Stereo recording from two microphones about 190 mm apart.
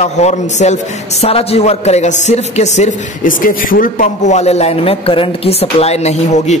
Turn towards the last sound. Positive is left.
turn(degrees=35)  # may be behind; listen again after turning